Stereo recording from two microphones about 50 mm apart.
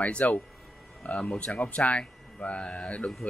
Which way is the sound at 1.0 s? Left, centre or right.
Centre.